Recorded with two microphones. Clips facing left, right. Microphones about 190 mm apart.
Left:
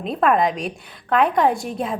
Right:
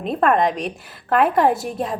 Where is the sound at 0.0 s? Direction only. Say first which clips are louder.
Right 1 dB; centre (ahead or behind).